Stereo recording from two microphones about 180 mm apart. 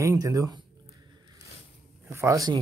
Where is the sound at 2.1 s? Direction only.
15° right (ahead or behind).